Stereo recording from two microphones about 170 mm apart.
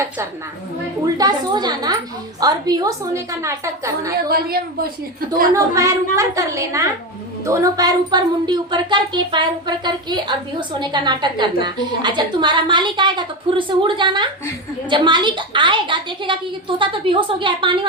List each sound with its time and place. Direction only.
1.0 s a woman's voice: 25° right (ahead or behind)
4.3 s a woman's voice: 60° right (ahead or behind)
5.5 s a woman's voice: 20° right (ahead or behind)